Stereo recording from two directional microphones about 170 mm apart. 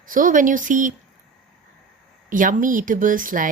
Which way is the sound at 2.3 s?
50° right (ahead or behind).